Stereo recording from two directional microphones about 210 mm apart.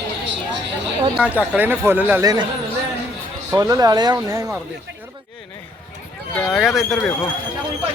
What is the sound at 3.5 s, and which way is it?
Speech, 15° right (ahead or behind).